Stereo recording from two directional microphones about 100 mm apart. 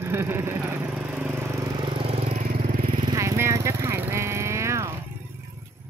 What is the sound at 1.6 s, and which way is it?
Vehicle, 50° right (ahead or behind).